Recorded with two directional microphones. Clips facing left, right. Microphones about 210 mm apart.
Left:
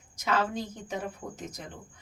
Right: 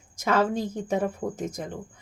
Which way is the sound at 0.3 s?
50° right (ahead or behind).